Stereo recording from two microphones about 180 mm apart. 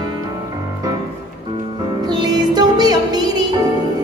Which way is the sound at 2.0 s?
20° right (ahead or behind).